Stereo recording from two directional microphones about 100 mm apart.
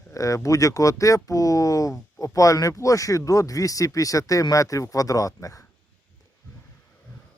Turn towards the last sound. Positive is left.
turn(degrees=35)  # may be behind; listen again after turning